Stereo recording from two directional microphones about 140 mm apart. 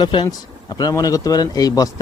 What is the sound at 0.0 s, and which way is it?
Speech, 35° left (ahead or behind).